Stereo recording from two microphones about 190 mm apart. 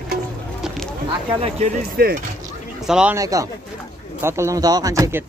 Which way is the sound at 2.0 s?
50° right (ahead or behind).